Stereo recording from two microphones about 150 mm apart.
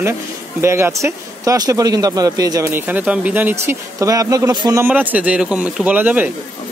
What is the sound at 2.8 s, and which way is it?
Speech, 10° right (ahead or behind).